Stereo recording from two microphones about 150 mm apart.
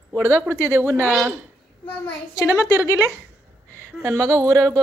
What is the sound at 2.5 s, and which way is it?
Speech, 20° left (ahead or behind).